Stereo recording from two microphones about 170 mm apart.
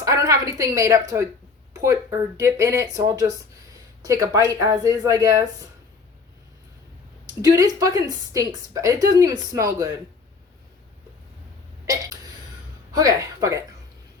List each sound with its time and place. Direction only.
0.0 s a sound: 20° right (ahead or behind)
1.7 s a woman's voice: 20° right (ahead or behind)
7.4 s a woman's voice: 20° right (ahead or behind)
11.9 s hiccup: 20° right (ahead or behind)
12.9 s speech: 20° right (ahead or behind)